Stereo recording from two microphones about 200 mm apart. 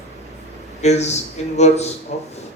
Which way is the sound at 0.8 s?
35° left (ahead or behind).